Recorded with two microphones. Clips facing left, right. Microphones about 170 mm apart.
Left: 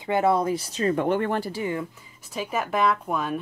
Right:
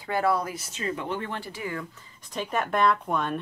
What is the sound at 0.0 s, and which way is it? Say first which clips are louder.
Speech: left 4 dB; 20° left (ahead or behind).